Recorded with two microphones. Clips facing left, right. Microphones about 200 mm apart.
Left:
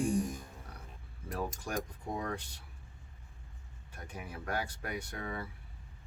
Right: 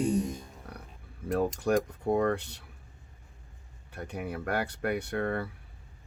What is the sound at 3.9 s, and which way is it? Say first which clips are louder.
Speech: right 9 dB; 65° right (ahead or behind).